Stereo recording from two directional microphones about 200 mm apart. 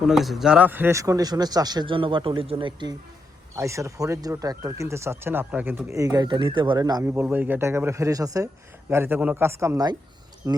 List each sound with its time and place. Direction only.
0.0 s a man's voice: centre (ahead or behind)